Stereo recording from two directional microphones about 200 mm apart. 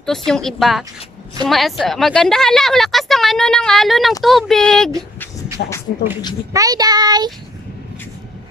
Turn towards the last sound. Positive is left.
turn(degrees=-20)  # may be behind; listen again after turning